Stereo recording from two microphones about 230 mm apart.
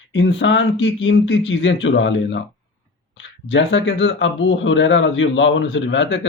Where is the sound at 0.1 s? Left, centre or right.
Left.